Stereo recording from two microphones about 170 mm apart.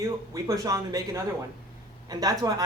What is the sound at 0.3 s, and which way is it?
A man's voice, 20° right (ahead or behind).